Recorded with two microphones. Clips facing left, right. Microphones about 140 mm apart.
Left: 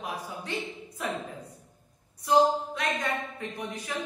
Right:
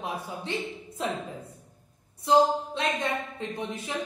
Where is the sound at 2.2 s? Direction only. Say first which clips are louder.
Right 1 dB; 25° right (ahead or behind).